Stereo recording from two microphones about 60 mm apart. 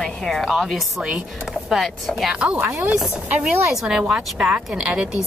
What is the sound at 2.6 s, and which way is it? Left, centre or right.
Speech, right.